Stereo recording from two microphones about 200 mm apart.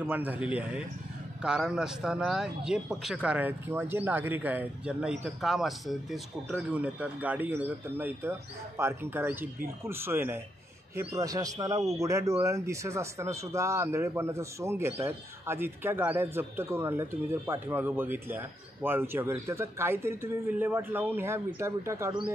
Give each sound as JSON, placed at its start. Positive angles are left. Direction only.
{"t": 0.0, "sound": "speech", "side_deg": -10}